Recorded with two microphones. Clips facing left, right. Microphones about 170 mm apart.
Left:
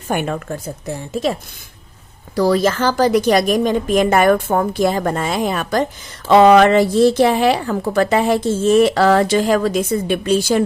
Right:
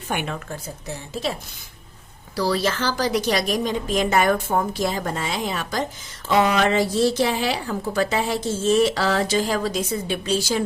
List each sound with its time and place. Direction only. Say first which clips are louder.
0.1 s a woman's voice: left 7 dB; 45° left (ahead or behind)
2.3 s a woman's voice: left 7 dB; 50° left (ahead or behind)
6.2 s a woman's voice: left 10 dB; 80° left; by 10.6 s 55° left (ahead or behind)